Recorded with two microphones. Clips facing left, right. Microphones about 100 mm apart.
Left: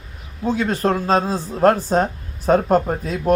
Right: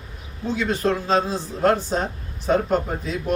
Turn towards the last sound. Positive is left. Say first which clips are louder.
# left 6 dB
turn(degrees=45)  # may be behind; listen again after turning